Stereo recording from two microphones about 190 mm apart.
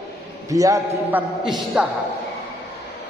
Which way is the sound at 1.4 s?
5° right (ahead or behind).